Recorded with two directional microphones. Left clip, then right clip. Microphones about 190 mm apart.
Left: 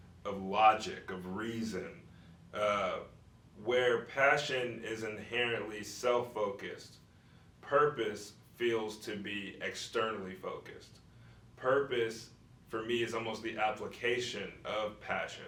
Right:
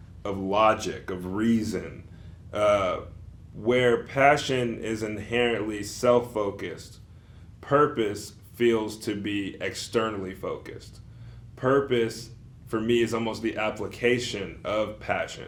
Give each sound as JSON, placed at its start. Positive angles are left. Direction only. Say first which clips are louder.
{"t": 0.2, "sound": "speech", "louder": "right 6 dB", "side_deg": -40}
{"t": 7.7, "sound": "speech", "louder": "right 7 dB", "side_deg": -45}